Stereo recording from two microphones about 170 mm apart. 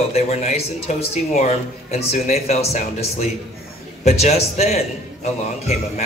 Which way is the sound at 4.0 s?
40° left (ahead or behind).